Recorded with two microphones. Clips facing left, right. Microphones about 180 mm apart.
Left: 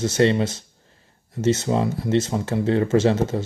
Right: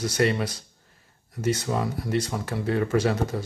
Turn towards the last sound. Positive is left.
turn(degrees=25)  # may be behind; listen again after turning